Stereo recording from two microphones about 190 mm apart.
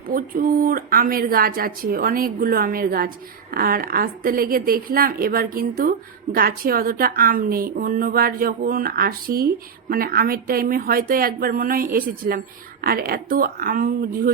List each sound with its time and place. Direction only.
0.1 s a woman's voice: 50° right (ahead or behind)